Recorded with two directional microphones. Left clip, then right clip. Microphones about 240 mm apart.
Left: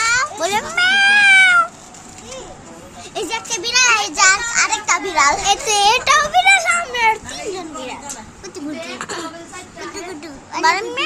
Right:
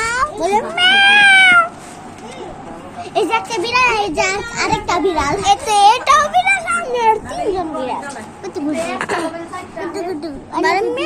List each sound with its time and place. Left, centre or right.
0.0 s a sound: centre
0.4 s cat: left
3.2 s a child's voice: left
5.5 s a child's voice: centre
6.3 s a sound: left
6.8 s children playing: centre
8.5 s speech: centre
10.6 s speech: centre